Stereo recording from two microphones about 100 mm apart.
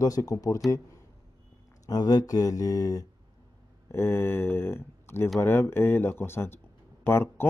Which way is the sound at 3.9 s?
25° left (ahead or behind).